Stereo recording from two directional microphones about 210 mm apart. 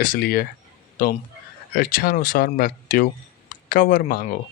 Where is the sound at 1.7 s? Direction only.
45° left (ahead or behind).